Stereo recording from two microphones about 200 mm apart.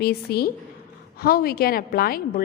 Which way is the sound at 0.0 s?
50° left (ahead or behind).